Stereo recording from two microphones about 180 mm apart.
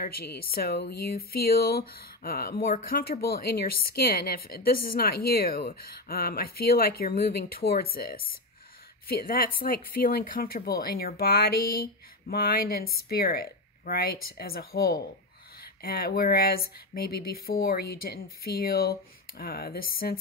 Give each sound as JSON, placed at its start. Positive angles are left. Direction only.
{"t": 0.0, "sound": "speech", "side_deg": 60}